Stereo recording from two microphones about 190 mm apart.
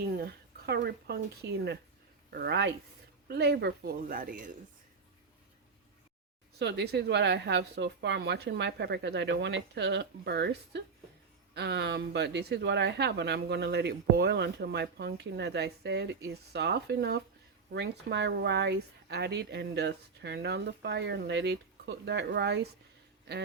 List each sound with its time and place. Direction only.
0.0 s speech: 55° right (ahead or behind)
6.6 s speech: 60° right (ahead or behind)